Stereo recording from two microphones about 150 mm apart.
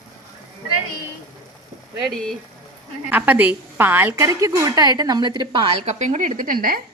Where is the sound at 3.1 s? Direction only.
10° right (ahead or behind); by 5.6 s 30° right (ahead or behind).